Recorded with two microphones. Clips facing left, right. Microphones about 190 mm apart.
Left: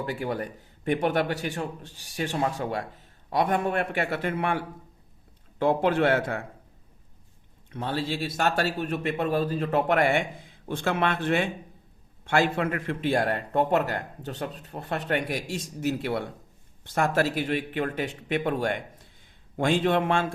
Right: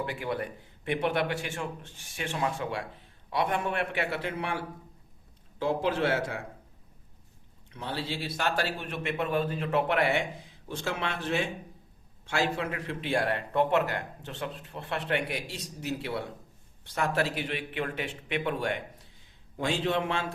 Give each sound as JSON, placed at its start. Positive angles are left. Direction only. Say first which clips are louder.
{"t": 0.0, "sound": "a man's voice", "louder": "left 2 dB", "side_deg": 40}
{"t": 7.7, "sound": "a man's voice", "louder": "left 5 dB", "side_deg": 50}